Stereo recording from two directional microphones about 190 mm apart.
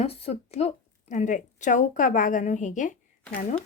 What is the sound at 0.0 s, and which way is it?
Speech, 30° left (ahead or behind).